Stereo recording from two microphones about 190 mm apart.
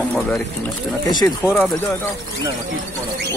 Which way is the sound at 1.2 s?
5° left (ahead or behind).